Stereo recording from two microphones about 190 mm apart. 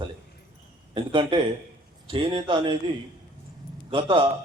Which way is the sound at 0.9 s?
25° right (ahead or behind).